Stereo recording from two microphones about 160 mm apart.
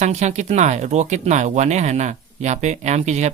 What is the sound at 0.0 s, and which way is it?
Speech, 45° right (ahead or behind).